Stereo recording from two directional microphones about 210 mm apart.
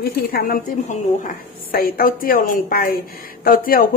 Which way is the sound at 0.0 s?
45° left (ahead or behind).